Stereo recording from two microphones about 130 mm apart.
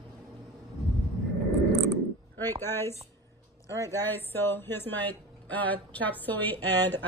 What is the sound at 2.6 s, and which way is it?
A woman's voice, 15° left (ahead or behind).